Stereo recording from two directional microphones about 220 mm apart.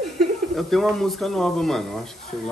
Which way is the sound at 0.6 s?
Centre (ahead or behind).